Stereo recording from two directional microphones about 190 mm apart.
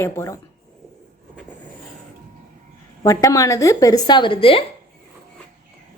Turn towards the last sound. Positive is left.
turn(degrees=30)  # may be behind; listen again after turning